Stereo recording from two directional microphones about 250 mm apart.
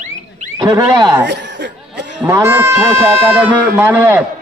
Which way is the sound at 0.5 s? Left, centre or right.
Centre.